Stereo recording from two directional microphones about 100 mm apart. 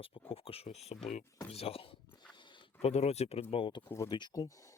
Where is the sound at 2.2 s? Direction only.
50° left (ahead or behind).